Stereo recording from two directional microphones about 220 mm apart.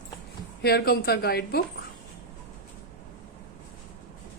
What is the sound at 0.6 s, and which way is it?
A woman's voice, 45° left (ahead or behind).